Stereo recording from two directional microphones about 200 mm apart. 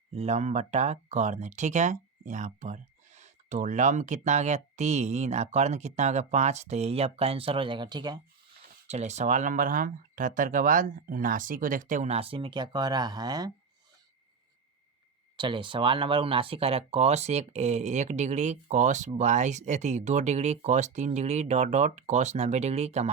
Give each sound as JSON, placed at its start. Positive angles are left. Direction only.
{"t": 0.1, "sound": "speech", "side_deg": -35}
{"t": 8.9, "sound": "speech", "side_deg": -35}
{"t": 15.4, "sound": "speech", "side_deg": -25}